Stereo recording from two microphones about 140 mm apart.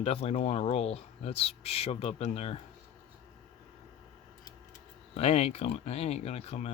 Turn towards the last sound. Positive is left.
turn(degrees=50)  # may be behind; listen again after turning